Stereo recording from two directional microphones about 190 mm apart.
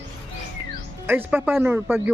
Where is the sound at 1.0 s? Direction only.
10° right (ahead or behind).